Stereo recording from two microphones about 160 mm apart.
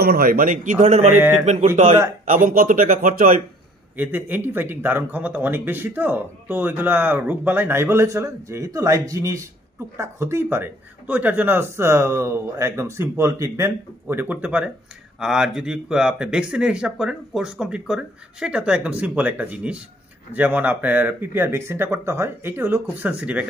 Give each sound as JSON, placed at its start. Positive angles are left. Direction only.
{"t": 0.0, "sound": "speech", "side_deg": -70}
{"t": 1.1, "sound": "speech", "side_deg": -15}
{"t": 1.4, "sound": "speech", "side_deg": -45}
{"t": 2.2, "sound": "speech", "side_deg": -55}
{"t": 3.9, "sound": "speech", "side_deg": -10}